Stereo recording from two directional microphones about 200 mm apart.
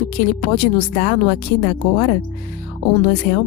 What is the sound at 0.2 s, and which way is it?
Speech, 45° left (ahead or behind).